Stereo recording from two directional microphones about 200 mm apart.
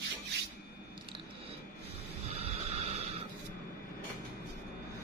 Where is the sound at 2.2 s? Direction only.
30° right (ahead or behind).